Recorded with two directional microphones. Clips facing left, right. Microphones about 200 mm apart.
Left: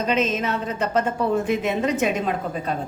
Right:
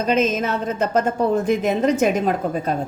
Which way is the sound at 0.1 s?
45° right (ahead or behind).